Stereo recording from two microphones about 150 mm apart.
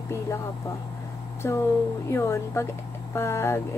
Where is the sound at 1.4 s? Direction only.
20° left (ahead or behind).